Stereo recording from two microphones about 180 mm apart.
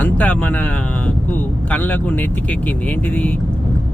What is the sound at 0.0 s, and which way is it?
Speech, 10° left (ahead or behind).